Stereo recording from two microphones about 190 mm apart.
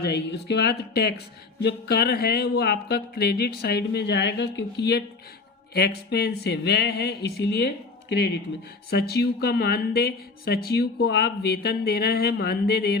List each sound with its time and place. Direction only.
0.0 s speech: 60° left (ahead or behind)
8.9 s speech: 55° left (ahead or behind)